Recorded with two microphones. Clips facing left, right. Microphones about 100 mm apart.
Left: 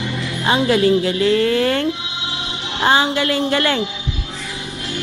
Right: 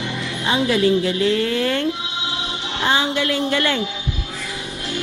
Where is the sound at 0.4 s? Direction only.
45° left (ahead or behind).